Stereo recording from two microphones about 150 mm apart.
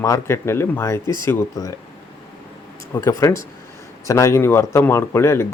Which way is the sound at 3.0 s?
20° left (ahead or behind).